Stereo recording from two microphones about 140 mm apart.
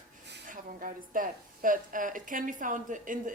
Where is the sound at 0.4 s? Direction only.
75° right (ahead or behind).